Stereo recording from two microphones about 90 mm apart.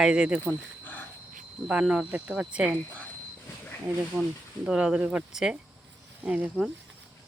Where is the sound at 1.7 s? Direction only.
10° right (ahead or behind).